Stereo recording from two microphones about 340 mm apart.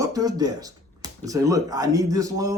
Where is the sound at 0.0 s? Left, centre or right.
Centre.